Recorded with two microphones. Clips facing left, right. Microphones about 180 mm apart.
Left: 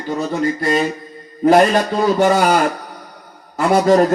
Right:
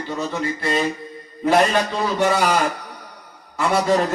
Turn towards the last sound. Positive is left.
turn(degrees=45)  # may be behind; listen again after turning